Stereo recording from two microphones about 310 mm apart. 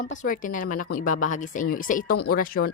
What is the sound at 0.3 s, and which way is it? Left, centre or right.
Speech, left.